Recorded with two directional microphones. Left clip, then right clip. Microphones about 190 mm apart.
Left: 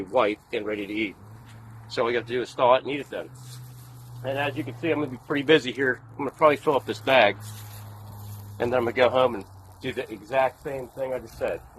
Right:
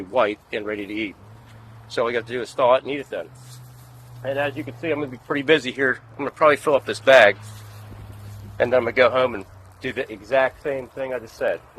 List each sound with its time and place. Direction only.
0.1 s speech: 55° right (ahead or behind)
8.5 s speech: 40° right (ahead or behind)